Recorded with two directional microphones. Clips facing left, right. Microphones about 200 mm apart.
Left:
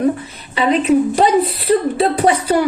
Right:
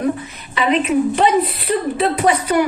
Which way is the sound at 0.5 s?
35° left (ahead or behind).